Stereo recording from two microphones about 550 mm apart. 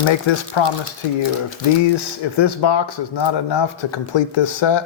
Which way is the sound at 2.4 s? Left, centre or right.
Left.